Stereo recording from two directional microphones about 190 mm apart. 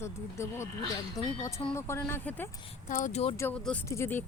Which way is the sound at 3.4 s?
10° left (ahead or behind).